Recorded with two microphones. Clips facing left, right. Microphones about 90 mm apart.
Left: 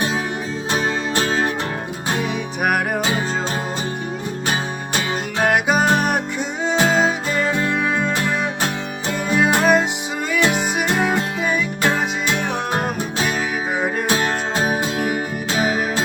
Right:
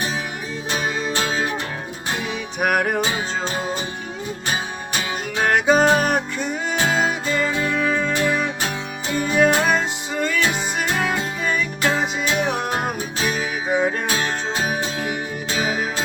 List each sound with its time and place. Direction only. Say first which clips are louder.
2.6 s music: right 1 dB; centre (ahead or behind)
5.4 s music: right 1 dB; 5° left (ahead or behind)
7.7 s music: left 1 dB; 15° left (ahead or behind)
9.1 s music: right 1 dB; 5° left (ahead or behind)
13.7 s music: right 5 dB; 5° left (ahead or behind)